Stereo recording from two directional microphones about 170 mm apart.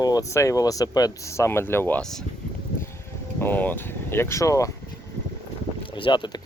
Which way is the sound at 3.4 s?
10° left (ahead or behind).